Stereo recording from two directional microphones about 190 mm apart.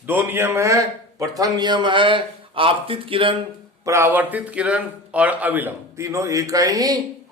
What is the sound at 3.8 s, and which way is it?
Speech, 15° right (ahead or behind).